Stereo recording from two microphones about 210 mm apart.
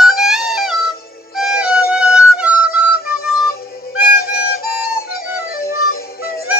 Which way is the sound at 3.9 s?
45° left (ahead or behind).